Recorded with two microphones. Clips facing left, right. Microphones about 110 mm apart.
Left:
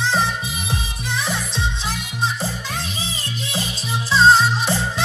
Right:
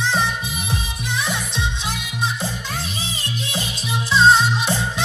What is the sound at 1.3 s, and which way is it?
Music, 35° left (ahead or behind).